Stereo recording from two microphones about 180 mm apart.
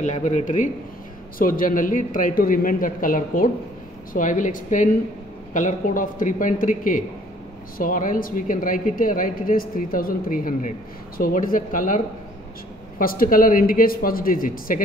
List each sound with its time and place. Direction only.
0.0 s a man's voice: 40° left (ahead or behind)
13.0 s a woman's voice: 55° left (ahead or behind)